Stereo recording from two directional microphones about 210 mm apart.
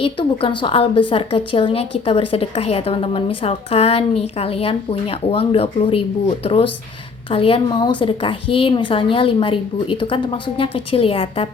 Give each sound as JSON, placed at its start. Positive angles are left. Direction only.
{"t": 0.0, "sound": "a woman's voice", "side_deg": 25}